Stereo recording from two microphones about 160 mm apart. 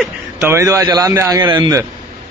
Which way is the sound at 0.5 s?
20° right (ahead or behind).